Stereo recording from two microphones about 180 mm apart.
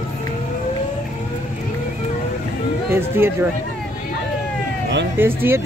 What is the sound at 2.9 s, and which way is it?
Speech, 15° right (ahead or behind).